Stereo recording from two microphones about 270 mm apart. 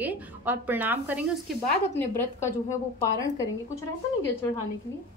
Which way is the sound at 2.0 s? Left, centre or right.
Centre.